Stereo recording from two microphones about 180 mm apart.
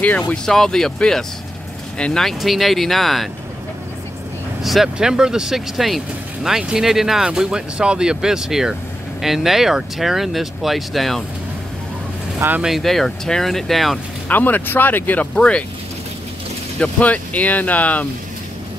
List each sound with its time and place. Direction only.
0.3 s speech: 5° left (ahead or behind)
4.6 s speech: centre (ahead or behind)
12.4 s speech: 10° right (ahead or behind); by 15.6 s 5° left (ahead or behind)
16.8 s speech: 10° left (ahead or behind)